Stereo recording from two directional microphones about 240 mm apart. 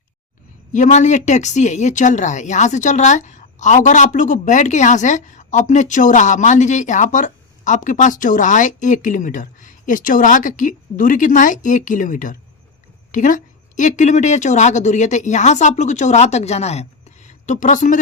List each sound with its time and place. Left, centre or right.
0.7 s a woman's voice: left